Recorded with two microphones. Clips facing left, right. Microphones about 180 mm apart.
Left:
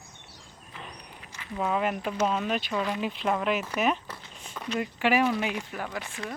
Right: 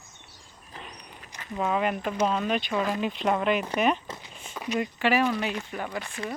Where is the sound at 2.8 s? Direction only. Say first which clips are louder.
Right 2 dB; 45° right (ahead or behind).